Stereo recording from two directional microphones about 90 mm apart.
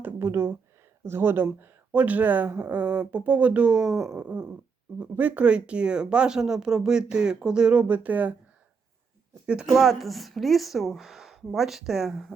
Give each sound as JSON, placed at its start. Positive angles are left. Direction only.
{"t": 0.0, "sound": "a sound", "side_deg": -25}
{"t": 1.0, "sound": "speech", "side_deg": -25}
{"t": 9.5, "sound": "speech", "side_deg": -10}